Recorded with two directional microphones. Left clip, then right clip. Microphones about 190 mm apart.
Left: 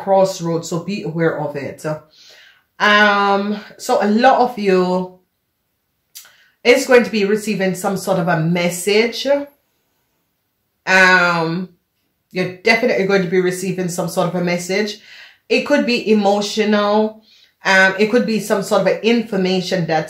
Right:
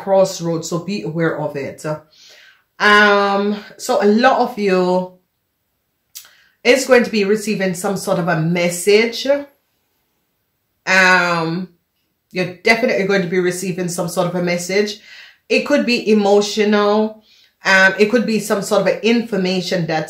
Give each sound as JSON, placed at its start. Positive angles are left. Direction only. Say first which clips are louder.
{"t": 0.0, "sound": "speech", "louder": "even", "side_deg": -20}
{"t": 6.1, "sound": "a sound", "louder": "right 1 dB", "side_deg": -15}
{"t": 6.6, "sound": "speech", "louder": "left 1 dB", "side_deg": -15}
{"t": 10.8, "sound": "speech", "louder": "left 1 dB", "side_deg": -15}